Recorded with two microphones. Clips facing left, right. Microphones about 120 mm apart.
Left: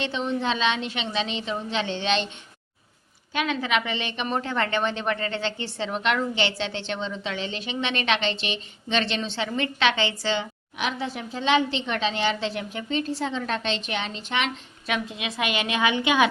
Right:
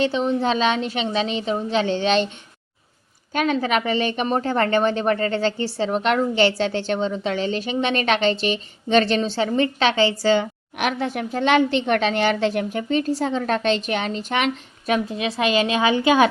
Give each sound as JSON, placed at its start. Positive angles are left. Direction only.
{"t": 0.0, "sound": "a woman's voice", "side_deg": -40}
{"t": 3.3, "sound": "a woman's voice", "side_deg": -40}